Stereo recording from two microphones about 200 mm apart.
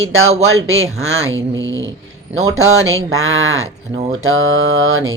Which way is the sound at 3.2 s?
90° right.